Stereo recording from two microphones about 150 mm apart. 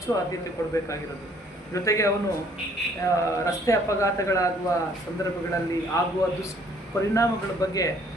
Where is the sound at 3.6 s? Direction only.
20° left (ahead or behind).